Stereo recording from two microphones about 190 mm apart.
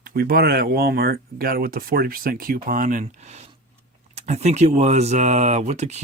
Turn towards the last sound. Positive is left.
turn(degrees=-35)  # may be behind; listen again after turning